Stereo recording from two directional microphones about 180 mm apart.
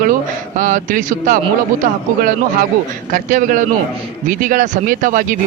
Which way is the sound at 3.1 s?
45° right (ahead or behind).